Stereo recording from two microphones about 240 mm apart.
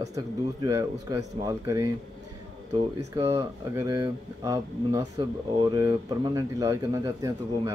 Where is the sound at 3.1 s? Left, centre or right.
Centre.